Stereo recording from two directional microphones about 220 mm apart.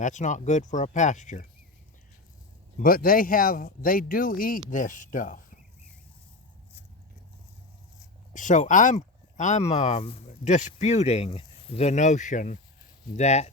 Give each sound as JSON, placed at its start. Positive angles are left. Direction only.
{"t": 0.0, "sound": "speech", "side_deg": 35}
{"t": 2.7, "sound": "speech", "side_deg": 40}
{"t": 8.3, "sound": "speech", "side_deg": 35}